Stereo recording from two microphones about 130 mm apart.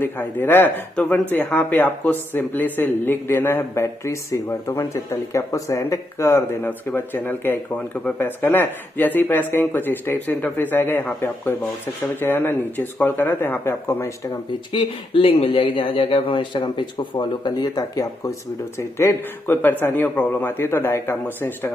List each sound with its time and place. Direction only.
0.0 s speech: 15° left (ahead or behind)
14.7 s speech: 40° left (ahead or behind)
18.9 s speech: 20° left (ahead or behind)